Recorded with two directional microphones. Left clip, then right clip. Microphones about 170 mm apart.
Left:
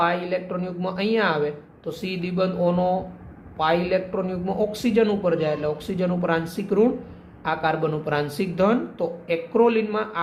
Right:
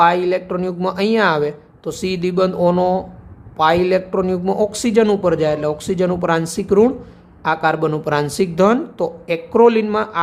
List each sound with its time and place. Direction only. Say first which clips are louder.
0.0 s speech: right 9 dB; 50° right (ahead or behind)